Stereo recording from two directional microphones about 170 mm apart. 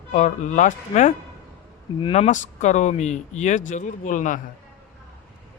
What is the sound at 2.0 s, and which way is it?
Speech, 35° left (ahead or behind).